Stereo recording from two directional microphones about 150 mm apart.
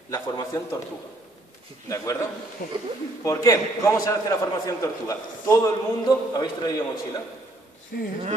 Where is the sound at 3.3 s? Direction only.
20° left (ahead or behind).